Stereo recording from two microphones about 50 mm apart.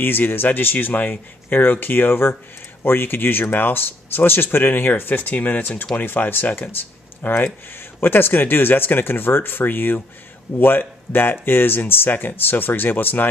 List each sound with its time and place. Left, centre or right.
0.0 s speech: left